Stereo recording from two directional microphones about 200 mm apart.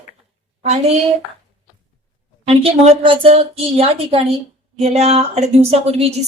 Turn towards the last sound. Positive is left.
turn(degrees=-30)  # may be behind; listen again after turning